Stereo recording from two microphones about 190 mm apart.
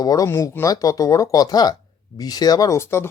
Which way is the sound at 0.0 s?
20° left (ahead or behind).